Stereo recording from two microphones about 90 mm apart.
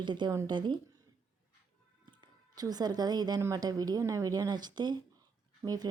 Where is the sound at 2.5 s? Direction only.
45° right (ahead or behind).